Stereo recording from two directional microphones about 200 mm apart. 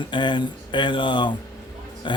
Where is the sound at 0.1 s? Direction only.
25° left (ahead or behind).